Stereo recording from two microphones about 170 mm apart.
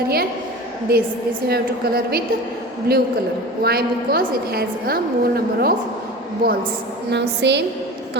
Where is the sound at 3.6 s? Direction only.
65° right (ahead or behind).